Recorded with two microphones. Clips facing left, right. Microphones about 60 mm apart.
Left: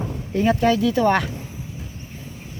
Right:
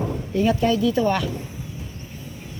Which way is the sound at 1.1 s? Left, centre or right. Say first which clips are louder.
Left 3 dB; left.